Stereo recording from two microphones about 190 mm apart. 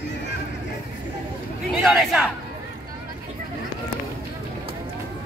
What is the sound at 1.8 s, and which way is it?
Chatter, centre (ahead or behind).